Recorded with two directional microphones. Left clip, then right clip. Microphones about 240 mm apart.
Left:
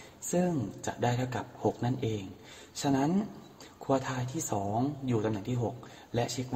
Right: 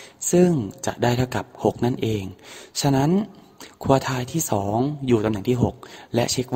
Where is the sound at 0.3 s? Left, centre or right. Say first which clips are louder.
Right 12 dB; right.